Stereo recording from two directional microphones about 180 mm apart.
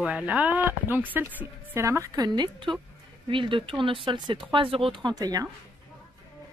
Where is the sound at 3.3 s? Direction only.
30° right (ahead or behind).